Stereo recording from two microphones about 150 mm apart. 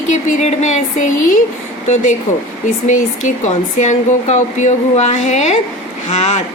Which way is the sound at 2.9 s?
60° left (ahead or behind).